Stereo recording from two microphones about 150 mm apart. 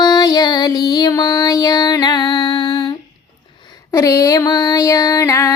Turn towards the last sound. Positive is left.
turn(degrees=20)  # may be behind; listen again after turning